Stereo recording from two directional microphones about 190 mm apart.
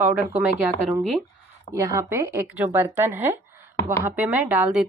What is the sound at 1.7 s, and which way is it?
Speech, 15° right (ahead or behind).